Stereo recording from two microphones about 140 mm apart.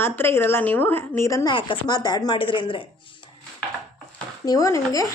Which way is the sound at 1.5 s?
35° left (ahead or behind).